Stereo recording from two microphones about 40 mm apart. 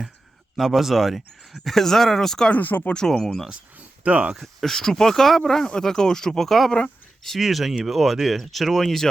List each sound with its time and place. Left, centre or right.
0.5 s speech: centre
1.7 s speech: centre
2.5 s speech: left
3.0 s speech: centre
3.8 s speech: right
4.4 s speech: centre
7.3 s speech: centre